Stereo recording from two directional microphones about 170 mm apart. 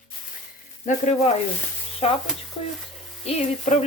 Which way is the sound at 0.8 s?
40° left (ahead or behind).